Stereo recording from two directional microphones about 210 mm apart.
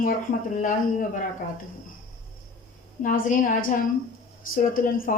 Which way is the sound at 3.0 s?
40° left (ahead or behind).